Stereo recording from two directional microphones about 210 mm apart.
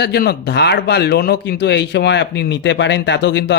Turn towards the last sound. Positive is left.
turn(degrees=55)  # may be behind; listen again after turning